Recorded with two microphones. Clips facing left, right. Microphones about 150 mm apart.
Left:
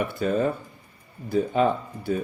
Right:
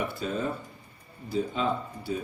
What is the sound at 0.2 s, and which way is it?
Speech, 55° left (ahead or behind).